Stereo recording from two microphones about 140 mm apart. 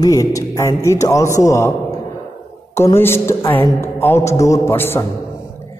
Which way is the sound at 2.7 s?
20° left (ahead or behind).